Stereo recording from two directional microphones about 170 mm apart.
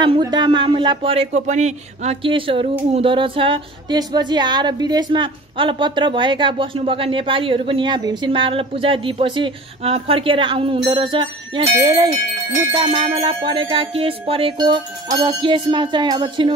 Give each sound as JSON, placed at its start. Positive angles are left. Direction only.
{"t": 0.0, "sound": "a woman's voice", "side_deg": -25}
{"t": 12.7, "sound": "a woman's voice", "side_deg": -35}